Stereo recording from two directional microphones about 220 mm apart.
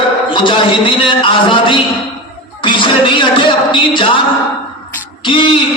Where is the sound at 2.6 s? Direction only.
20° left (ahead or behind).